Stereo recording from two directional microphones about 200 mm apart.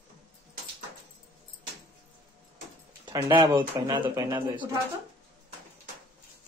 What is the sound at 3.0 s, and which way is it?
Speech, 20° right (ahead or behind).